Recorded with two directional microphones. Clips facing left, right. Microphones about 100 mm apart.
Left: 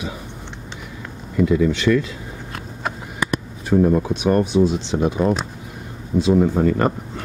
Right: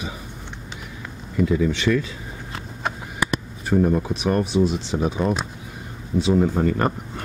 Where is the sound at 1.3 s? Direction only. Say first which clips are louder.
Left 3 dB; 90° left.